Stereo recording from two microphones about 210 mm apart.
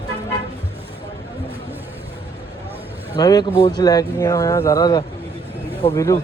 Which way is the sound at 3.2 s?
20° left (ahead or behind).